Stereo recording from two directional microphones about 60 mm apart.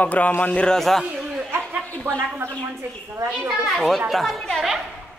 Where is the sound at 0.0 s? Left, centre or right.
Left.